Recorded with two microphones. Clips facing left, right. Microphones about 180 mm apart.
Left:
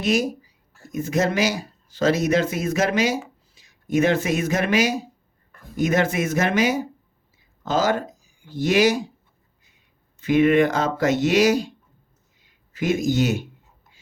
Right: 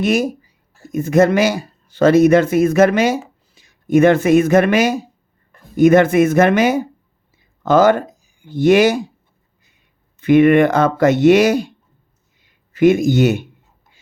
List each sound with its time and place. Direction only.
0.0 s speech: 55° right (ahead or behind)
10.2 s speech: 60° right (ahead or behind)